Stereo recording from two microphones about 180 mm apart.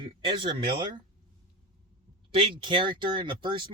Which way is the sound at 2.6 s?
25° right (ahead or behind).